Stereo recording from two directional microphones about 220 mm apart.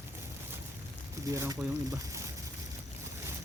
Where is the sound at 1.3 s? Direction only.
15° right (ahead or behind).